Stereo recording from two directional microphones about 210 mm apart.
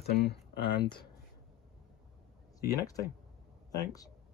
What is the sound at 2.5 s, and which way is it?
Speech, 15° left (ahead or behind).